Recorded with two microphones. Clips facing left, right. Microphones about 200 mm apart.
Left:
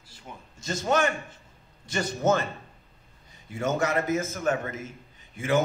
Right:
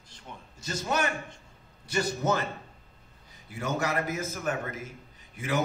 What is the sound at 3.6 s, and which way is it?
Speech, 25° left (ahead or behind).